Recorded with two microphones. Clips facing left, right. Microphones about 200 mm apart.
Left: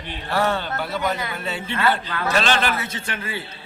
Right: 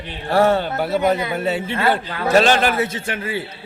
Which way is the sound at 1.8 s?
45° right (ahead or behind).